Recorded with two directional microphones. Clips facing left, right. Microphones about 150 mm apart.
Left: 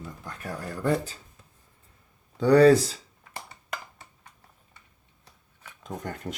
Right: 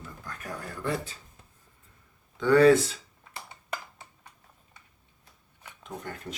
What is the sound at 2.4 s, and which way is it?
Speech, 35° left (ahead or behind).